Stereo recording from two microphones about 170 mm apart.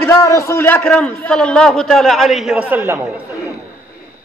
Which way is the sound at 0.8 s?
5° left (ahead or behind).